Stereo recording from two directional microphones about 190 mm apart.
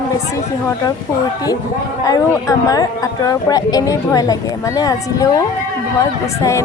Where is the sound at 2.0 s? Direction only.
20° left (ahead or behind).